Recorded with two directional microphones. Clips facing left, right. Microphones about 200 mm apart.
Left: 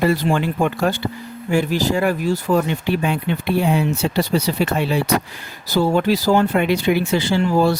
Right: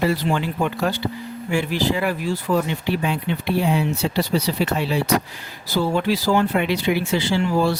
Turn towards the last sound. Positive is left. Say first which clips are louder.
# left 3 dB
turn(degrees=45)  # may be behind; listen again after turning